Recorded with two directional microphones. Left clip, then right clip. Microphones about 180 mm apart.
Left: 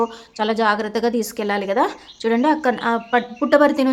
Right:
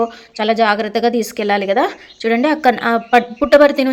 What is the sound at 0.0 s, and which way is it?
A woman's voice, 5° right (ahead or behind).